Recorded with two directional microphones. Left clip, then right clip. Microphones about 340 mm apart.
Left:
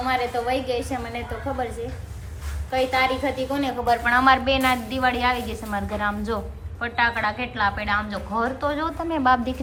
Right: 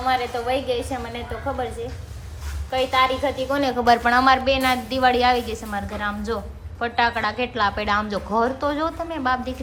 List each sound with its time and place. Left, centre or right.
0.0 s a woman's voice: centre
3.5 s a woman's voice: centre
4.0 s a woman's voice: centre